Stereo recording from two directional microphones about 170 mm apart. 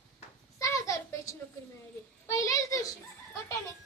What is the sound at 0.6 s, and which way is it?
Toothbrush, 20° left (ahead or behind).